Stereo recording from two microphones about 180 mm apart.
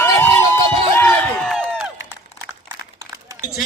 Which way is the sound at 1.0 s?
10° left (ahead or behind).